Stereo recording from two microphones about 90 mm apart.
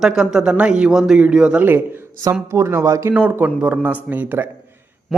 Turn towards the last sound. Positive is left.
turn(degrees=-20)  # may be behind; listen again after turning